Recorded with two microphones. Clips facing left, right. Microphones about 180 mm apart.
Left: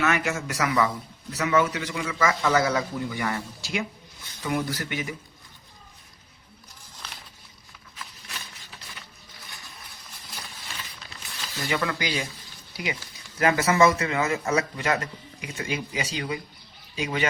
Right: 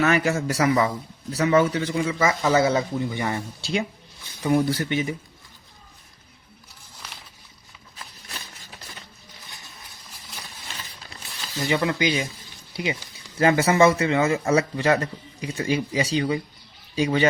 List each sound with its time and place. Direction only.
0.0 s speech: 35° right (ahead or behind)
11.6 s speech: 20° right (ahead or behind)